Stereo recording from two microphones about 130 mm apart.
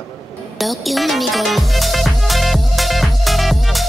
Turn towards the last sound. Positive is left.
turn(degrees=0)  # may be behind; listen again after turning